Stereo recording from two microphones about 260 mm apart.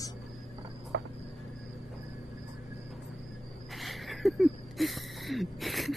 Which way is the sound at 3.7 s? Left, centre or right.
Centre.